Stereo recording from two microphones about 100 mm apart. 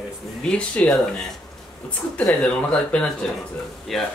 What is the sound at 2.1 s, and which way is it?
Speech, 10° left (ahead or behind).